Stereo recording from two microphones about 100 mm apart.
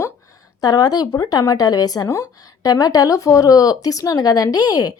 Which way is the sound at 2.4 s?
35° left (ahead or behind).